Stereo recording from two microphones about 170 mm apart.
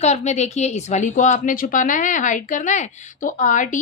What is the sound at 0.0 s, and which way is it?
A woman's voice, 40° left (ahead or behind).